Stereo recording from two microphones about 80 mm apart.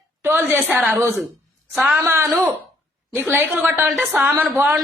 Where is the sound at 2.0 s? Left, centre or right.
Right.